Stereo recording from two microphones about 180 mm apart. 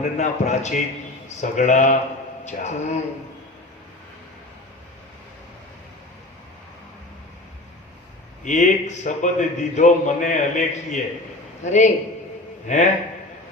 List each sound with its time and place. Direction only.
0.0 s a man's voice: 40° left (ahead or behind)
8.4 s a man's voice: 45° left (ahead or behind)